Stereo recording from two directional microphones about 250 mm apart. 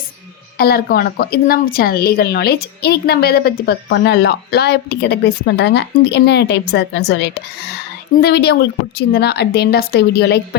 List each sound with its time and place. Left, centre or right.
0.6 s a woman's voice: left